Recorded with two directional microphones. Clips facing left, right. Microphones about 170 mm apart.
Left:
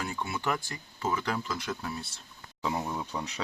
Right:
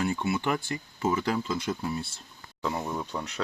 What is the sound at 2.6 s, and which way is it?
Speech, 5° left (ahead or behind).